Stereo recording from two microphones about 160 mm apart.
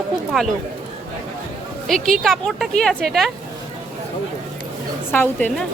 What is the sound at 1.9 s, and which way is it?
A woman's voice, 5° left (ahead or behind).